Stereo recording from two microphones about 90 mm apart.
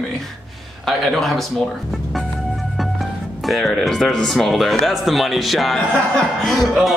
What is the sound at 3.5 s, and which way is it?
Speech, 5° left (ahead or behind).